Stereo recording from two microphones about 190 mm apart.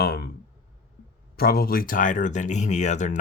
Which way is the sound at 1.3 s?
55° left (ahead or behind).